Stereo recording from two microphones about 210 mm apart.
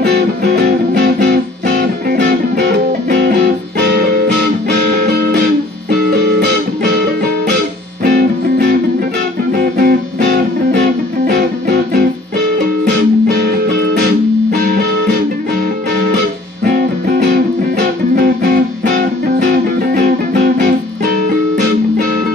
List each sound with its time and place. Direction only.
0.0 s music: 50° right (ahead or behind)
5.9 s music: 50° right (ahead or behind)
8.0 s music: 45° right (ahead or behind)
10.2 s music: 55° right (ahead or behind)
17.3 s music: 45° right (ahead or behind)